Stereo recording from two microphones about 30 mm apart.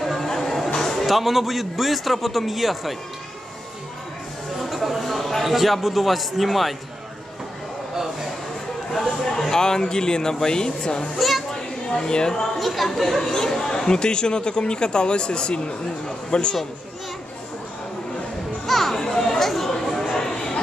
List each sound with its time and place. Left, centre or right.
0.0 s a sound: centre
1.0 s a man's voice: centre
4.6 s a sound: centre
5.4 s a man's voice: centre
7.9 s a sound: centre
8.9 s speech: centre
11.1 s a child's voice: centre
11.9 s speech: left
12.5 s a man's voice: centre
13.0 s a man's voice: centre; by 16.5 s left
18.7 s children playing: centre
18.9 s children playing: left
19.4 s a sound: centre
20.2 s bow-wow: centre